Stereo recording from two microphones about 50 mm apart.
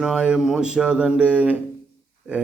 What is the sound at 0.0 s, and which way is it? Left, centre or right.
A man's voice, centre.